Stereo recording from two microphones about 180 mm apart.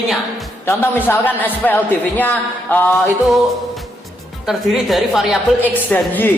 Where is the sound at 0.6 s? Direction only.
10° left (ahead or behind).